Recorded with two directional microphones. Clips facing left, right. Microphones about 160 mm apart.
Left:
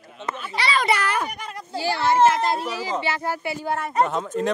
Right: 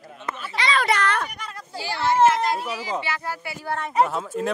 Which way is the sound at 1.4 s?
20° left (ahead or behind).